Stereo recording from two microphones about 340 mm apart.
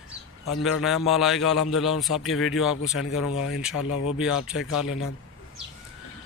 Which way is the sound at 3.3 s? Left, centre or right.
Left.